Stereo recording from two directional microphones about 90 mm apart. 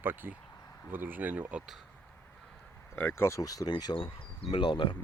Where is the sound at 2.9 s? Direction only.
25° left (ahead or behind).